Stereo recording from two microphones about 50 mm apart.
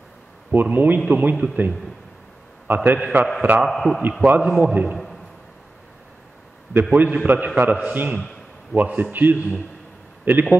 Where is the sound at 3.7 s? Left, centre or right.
Centre.